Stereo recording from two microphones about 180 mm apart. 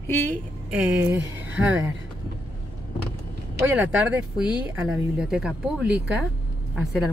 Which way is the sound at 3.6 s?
10° right (ahead or behind).